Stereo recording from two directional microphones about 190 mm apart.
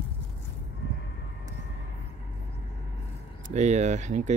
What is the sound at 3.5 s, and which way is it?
Speech, 35° right (ahead or behind).